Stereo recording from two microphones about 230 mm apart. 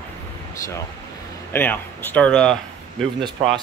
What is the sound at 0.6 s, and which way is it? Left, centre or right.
Speech, centre.